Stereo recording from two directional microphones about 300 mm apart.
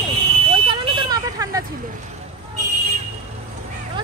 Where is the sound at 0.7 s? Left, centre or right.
Centre.